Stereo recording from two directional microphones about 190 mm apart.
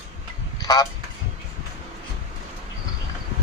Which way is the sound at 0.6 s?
20° left (ahead or behind).